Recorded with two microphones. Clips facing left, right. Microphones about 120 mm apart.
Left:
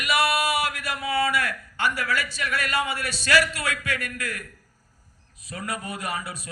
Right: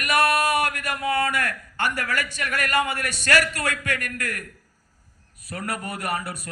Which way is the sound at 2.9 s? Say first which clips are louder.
Even; 45° right (ahead or behind).